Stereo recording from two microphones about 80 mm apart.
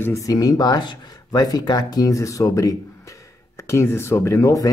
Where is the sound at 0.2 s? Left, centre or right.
Left.